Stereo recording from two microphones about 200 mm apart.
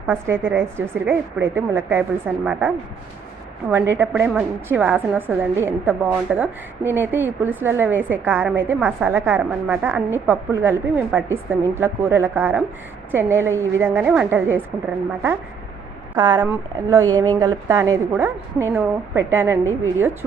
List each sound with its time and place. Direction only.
0.1 s a woman's voice: 10° right (ahead or behind)
16.1 s a woman's voice: 20° right (ahead or behind)